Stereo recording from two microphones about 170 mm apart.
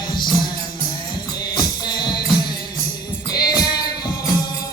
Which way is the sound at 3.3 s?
25° left (ahead or behind).